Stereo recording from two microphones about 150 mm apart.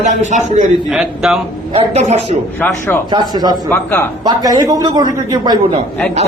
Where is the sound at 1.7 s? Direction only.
50° right (ahead or behind).